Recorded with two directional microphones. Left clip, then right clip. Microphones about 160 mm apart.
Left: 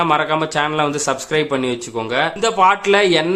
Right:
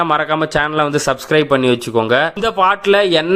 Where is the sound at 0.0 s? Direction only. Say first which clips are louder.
Right 1 dB; 35° right (ahead or behind).